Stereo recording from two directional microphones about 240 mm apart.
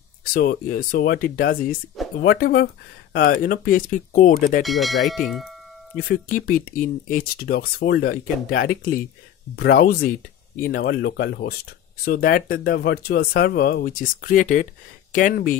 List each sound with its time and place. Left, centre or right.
0.2 s speech: left
4.6 s bell: centre
6.2 s speech: left